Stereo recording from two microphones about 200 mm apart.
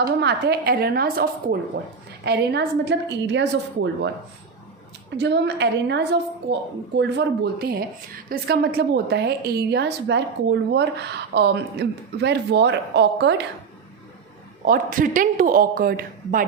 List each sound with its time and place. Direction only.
0.2 s a woman's voice: 55° right (ahead or behind)
5.1 s a woman's voice: 60° right (ahead or behind)
14.6 s speech: 45° right (ahead or behind)